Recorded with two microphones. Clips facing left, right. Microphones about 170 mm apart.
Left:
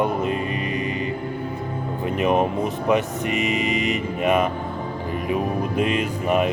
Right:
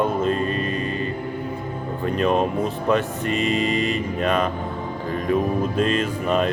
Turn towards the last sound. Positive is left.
turn(degrees=15)  # may be behind; listen again after turning